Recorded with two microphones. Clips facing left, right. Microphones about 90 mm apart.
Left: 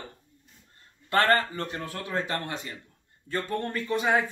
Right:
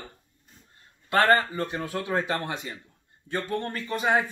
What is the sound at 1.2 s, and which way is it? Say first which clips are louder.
Speech: right 2 dB; 15° right (ahead or behind).